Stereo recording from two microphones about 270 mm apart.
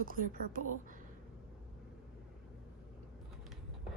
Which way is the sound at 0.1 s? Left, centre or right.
Right.